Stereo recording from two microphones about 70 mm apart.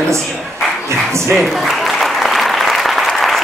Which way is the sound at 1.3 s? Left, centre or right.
Centre.